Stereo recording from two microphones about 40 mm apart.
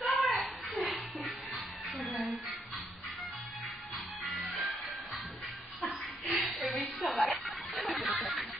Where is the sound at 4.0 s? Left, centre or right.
Centre.